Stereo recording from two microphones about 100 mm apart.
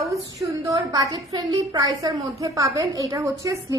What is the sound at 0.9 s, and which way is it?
A woman's voice, 45° right (ahead or behind).